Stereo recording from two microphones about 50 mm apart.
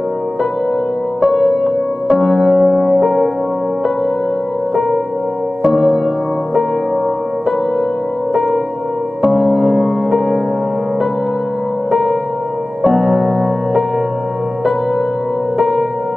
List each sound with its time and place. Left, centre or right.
1.3 s music: left
2.4 s music: centre
2.9 s music: right
9.3 s music: centre
11.9 s music: centre
15.5 s music: centre